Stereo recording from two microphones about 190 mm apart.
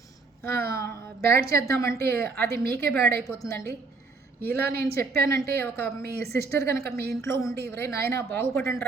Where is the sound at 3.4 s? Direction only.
15° left (ahead or behind).